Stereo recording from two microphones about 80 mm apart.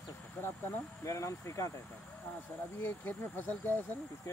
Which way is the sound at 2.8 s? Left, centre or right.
Left.